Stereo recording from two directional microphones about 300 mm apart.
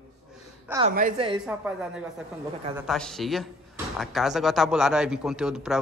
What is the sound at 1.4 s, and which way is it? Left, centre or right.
Speech, centre.